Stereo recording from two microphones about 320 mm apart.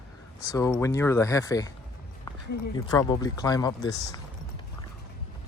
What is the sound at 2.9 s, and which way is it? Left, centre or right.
Speech, centre.